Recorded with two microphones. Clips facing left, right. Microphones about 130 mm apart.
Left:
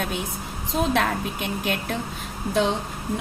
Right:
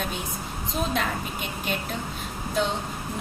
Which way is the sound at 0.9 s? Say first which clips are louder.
Left 4 dB; 90° left.